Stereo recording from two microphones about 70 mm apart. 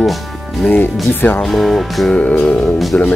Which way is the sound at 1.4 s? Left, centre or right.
Centre.